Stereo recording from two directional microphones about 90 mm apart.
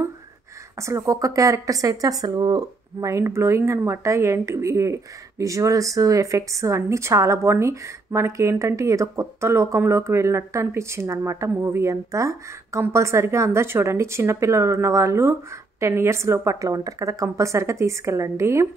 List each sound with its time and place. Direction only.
0.7 s speech: 35° right (ahead or behind)